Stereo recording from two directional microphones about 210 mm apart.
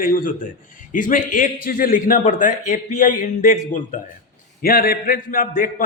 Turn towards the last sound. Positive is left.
turn(degrees=40)  # may be behind; listen again after turning